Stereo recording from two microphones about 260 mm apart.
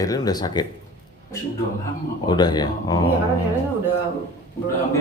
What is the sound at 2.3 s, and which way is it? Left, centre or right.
Speech, centre.